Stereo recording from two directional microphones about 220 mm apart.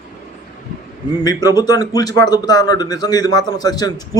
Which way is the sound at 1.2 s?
15° left (ahead or behind).